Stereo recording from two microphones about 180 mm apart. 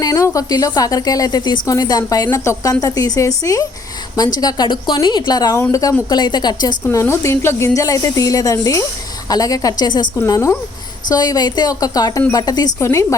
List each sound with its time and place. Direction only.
0.0 s a woman's voice: 20° left (ahead or behind)